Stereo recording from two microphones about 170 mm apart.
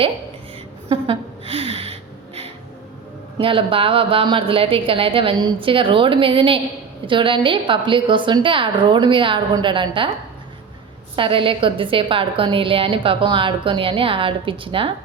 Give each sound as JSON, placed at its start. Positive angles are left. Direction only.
{"t": 0.9, "sound": "a sound", "side_deg": -35}
{"t": 3.3, "sound": "a woman's voice", "side_deg": -30}
{"t": 11.2, "sound": "a woman's voice", "side_deg": -30}